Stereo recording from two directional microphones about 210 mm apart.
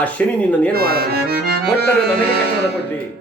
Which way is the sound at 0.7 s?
45° right (ahead or behind).